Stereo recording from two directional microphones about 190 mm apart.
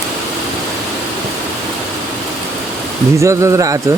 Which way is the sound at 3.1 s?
15° right (ahead or behind).